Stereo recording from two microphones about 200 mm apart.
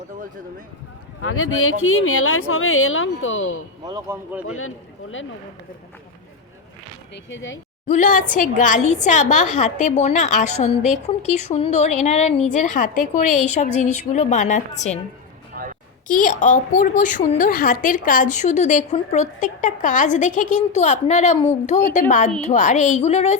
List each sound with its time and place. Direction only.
1.2 s speech: 90° left
3.8 s speech: 15° right (ahead or behind)
7.3 s speech: 70° left (ahead or behind)
7.9 s a woman's voice: 40° left (ahead or behind)
15.6 s a sound: 45° right (ahead or behind)
16.0 s a woman's voice: 40° left (ahead or behind)